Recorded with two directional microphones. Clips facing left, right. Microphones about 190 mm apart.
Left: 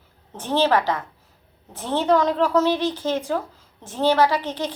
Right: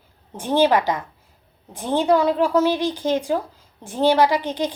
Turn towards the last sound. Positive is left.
turn(degrees=-15)  # may be behind; listen again after turning